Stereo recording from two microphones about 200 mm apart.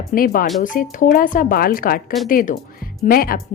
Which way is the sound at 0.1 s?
45° left (ahead or behind).